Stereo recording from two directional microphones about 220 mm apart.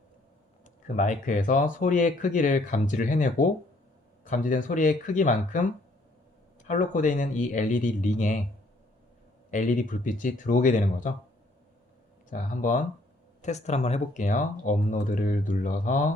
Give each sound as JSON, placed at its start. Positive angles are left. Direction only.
{"t": 0.6, "sound": "speech", "side_deg": 35}
{"t": 9.5, "sound": "speech", "side_deg": 35}
{"t": 12.3, "sound": "speech", "side_deg": 35}